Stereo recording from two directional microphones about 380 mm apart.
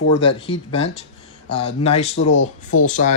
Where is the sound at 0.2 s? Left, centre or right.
Centre.